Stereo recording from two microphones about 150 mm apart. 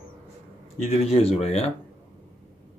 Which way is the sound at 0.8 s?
40° left (ahead or behind).